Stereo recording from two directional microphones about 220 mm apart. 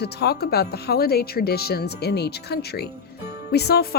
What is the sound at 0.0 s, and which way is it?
A woman's voice, 45° left (ahead or behind).